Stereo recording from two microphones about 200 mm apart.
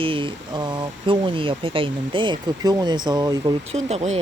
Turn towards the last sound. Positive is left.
turn(degrees=-30)  # may be behind; listen again after turning